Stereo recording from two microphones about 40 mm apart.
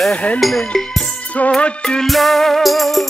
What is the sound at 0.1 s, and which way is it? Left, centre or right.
Speech, left.